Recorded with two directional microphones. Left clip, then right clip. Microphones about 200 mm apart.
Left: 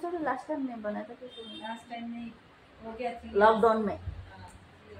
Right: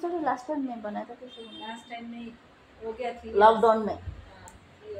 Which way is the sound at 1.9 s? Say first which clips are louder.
Right 1 dB; 15° right (ahead or behind).